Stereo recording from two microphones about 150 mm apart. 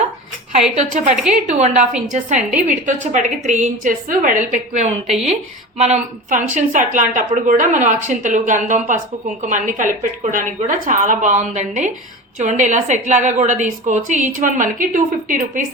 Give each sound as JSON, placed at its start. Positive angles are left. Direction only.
{"t": 1.3, "sound": "a woman's voice", "side_deg": -50}